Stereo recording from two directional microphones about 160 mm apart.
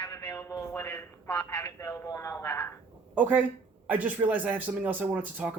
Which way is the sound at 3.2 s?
10° right (ahead or behind).